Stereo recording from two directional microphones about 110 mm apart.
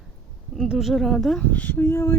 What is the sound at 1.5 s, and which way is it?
Speech, 15° left (ahead or behind).